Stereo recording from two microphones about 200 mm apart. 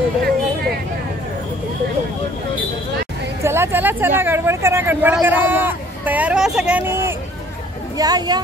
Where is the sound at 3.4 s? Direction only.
10° right (ahead or behind).